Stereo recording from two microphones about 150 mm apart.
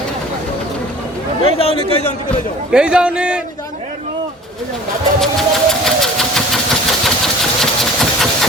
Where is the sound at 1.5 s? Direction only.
40° left (ahead or behind).